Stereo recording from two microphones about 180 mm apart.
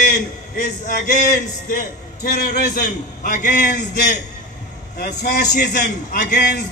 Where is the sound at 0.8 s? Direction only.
60° left (ahead or behind).